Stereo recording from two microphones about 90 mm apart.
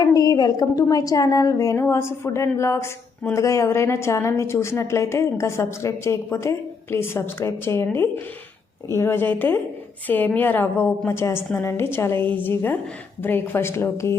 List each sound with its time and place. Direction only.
0.0 s a woman's voice: 45° left (ahead or behind)